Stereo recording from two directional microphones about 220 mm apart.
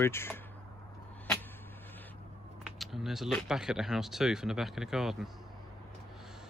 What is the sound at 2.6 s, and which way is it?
Speech, centre (ahead or behind).